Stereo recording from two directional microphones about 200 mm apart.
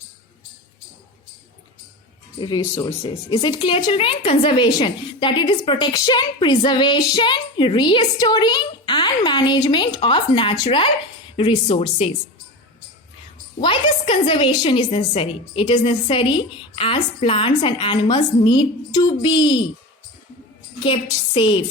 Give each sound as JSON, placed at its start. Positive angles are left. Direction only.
{"t": 2.4, "sound": "speech", "side_deg": 20}
{"t": 13.6, "sound": "speech", "side_deg": 25}
{"t": 20.8, "sound": "speech", "side_deg": 25}